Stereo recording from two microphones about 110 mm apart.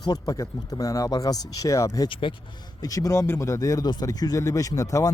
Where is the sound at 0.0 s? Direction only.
35° left (ahead or behind).